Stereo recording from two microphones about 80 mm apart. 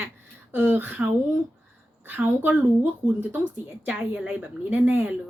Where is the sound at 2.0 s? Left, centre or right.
Right.